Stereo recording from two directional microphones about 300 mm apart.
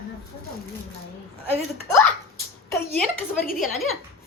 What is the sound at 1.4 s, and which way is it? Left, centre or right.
Speech, centre.